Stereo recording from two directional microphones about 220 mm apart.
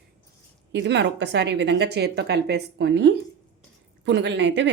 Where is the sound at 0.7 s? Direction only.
50° right (ahead or behind).